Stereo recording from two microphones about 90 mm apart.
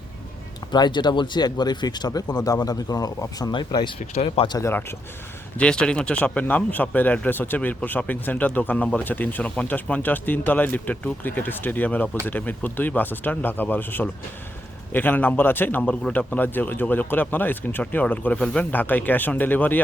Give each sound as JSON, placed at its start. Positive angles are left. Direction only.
{"t": 0.7, "sound": "speech", "side_deg": 55}
{"t": 4.6, "sound": "a man's voice", "side_deg": 30}
{"t": 5.5, "sound": "a man's voice", "side_deg": 10}
{"t": 15.8, "sound": "speech", "side_deg": 10}
{"t": 16.1, "sound": "a man's voice", "side_deg": 20}